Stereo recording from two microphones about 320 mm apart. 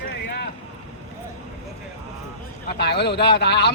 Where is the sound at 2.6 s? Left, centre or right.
Left.